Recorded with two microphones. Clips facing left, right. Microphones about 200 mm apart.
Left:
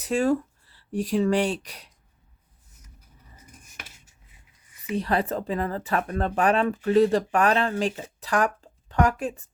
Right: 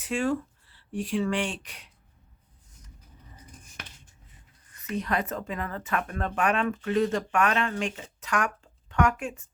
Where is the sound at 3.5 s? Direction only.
10° left (ahead or behind).